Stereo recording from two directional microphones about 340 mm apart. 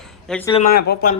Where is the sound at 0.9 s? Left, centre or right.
Left.